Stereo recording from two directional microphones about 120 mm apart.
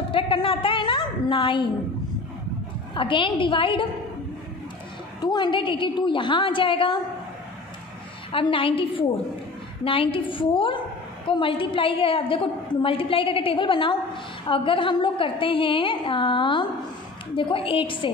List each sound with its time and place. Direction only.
0.1 s a sound: 45° left (ahead or behind)
2.9 s a woman's voice: 45° left (ahead or behind)
5.2 s a woman's voice: 35° left (ahead or behind)
8.3 s a woman's voice: 50° left (ahead or behind)